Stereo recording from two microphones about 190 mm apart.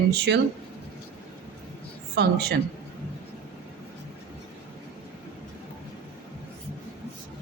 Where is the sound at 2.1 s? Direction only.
60° right (ahead or behind).